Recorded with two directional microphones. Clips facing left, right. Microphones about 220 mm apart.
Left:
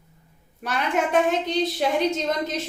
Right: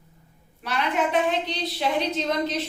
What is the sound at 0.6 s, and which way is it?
A woman's voice, 50° left (ahead or behind).